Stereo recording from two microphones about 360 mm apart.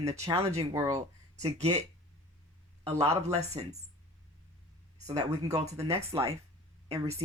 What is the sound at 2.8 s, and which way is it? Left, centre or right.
Speech, centre.